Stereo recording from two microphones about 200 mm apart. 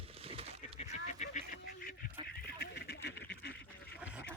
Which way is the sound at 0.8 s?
35° left (ahead or behind).